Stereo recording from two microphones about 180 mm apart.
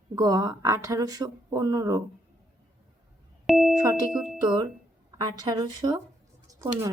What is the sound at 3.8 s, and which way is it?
Speech, 20° right (ahead or behind).